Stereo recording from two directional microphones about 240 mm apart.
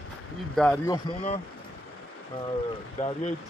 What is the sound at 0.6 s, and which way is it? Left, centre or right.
Speech, centre.